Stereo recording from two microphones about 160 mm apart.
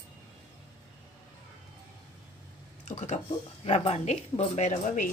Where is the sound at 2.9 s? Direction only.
45° left (ahead or behind).